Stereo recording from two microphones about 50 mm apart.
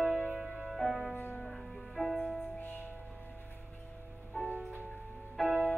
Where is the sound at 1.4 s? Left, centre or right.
Centre.